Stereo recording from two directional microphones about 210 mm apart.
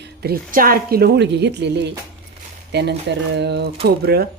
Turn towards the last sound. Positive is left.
turn(degrees=-50)  # may be behind; listen again after turning